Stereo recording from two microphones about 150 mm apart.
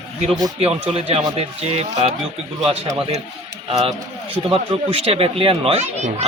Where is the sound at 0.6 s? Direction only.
40° right (ahead or behind).